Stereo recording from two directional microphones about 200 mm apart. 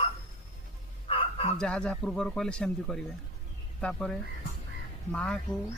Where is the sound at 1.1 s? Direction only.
30° left (ahead or behind).